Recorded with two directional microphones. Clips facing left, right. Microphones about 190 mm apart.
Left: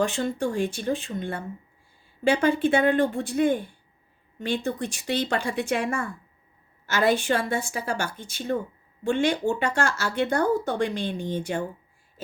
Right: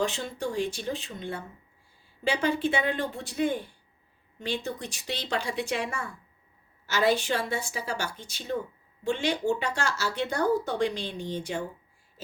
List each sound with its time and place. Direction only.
0.0 s speech: 50° left (ahead or behind)